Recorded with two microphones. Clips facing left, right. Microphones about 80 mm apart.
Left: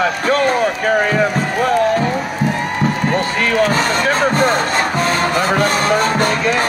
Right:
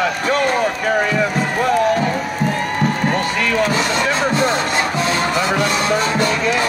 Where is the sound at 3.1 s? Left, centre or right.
Left.